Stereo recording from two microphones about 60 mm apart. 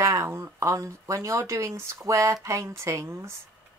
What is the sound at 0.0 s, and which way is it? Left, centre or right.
Speech, right.